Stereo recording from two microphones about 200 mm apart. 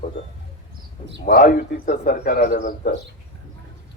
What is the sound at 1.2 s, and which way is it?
A man's voice, 45° left (ahead or behind).